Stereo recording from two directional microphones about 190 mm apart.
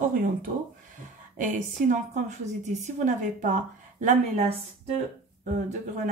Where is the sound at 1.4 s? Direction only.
45° right (ahead or behind).